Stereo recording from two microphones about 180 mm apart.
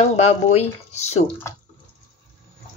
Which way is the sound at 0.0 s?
35° left (ahead or behind).